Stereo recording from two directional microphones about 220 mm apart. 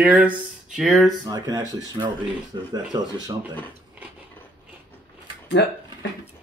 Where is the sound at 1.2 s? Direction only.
15° right (ahead or behind).